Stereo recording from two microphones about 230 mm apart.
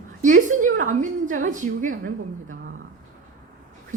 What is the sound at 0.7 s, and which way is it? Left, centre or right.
A woman's voice, right.